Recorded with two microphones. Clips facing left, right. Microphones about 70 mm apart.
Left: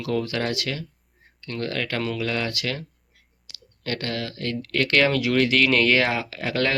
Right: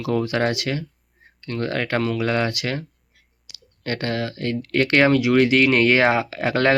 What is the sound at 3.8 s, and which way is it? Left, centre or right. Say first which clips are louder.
Speech: right 4 dB; right.